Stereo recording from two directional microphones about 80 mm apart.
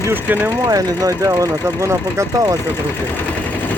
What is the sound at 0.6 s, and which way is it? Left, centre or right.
Speech, right.